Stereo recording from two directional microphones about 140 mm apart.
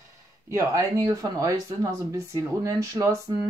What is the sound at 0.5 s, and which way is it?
Speech, 25° right (ahead or behind).